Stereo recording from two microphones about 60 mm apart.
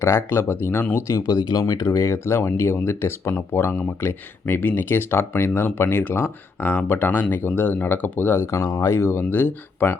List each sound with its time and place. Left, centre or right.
0.0 s speech: left
1.1 s speech: left
2.1 s speech: left
8.4 s speech: left